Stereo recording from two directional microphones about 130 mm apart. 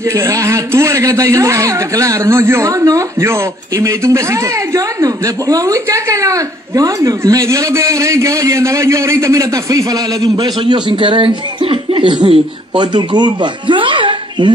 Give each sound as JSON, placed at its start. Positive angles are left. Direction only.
{"t": 0.1, "sound": "a man's voice", "side_deg": -25}